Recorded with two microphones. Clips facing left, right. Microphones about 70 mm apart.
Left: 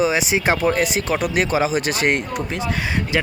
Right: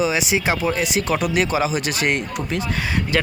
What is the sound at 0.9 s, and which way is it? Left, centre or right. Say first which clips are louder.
Speech: even; left.